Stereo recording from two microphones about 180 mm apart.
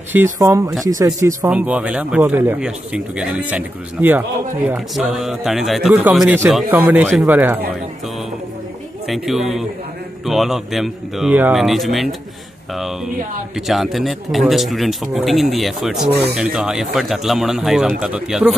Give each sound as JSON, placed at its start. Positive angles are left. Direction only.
{"t": 0.1, "sound": "speech", "side_deg": -15}
{"t": 9.0, "sound": "speech", "side_deg": 0}